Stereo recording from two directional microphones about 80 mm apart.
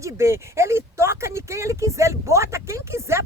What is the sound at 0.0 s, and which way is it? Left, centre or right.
Speech, right.